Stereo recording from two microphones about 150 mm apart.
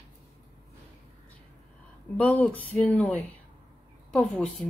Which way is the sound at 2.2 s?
10° left (ahead or behind).